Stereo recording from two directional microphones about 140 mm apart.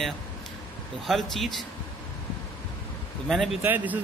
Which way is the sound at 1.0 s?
Centre (ahead or behind).